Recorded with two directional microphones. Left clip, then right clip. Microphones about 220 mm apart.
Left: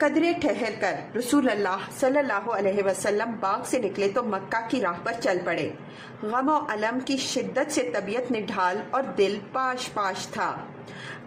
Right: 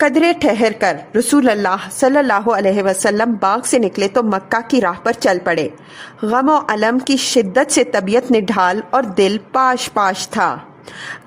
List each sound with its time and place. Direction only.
0.0 s a woman's voice: 45° right (ahead or behind)